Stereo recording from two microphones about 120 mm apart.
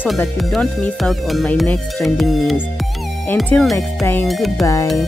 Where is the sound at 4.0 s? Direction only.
20° left (ahead or behind).